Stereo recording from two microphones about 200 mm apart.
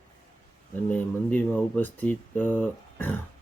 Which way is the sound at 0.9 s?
5° left (ahead or behind).